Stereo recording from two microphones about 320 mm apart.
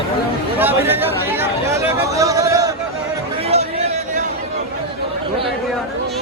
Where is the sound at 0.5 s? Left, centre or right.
Centre.